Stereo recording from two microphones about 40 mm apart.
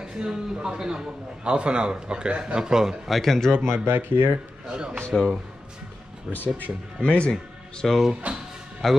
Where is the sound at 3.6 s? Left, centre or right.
Right.